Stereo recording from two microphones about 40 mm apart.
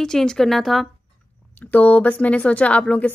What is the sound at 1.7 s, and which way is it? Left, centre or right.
Speech, left.